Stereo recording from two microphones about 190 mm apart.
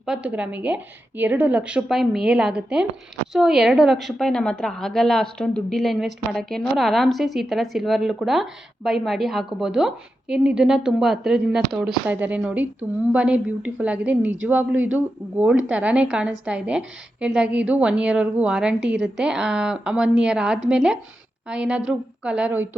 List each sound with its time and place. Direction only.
0.0 s a woman's voice: 5° right (ahead or behind)